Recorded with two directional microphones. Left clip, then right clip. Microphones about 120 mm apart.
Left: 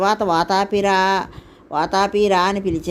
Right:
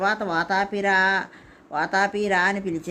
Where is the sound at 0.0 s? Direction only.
35° left (ahead or behind).